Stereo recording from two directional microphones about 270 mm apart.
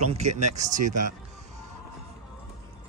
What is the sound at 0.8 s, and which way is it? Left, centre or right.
Speech, right.